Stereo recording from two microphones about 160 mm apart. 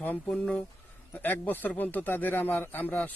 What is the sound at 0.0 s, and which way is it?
Speech, 10° left (ahead or behind).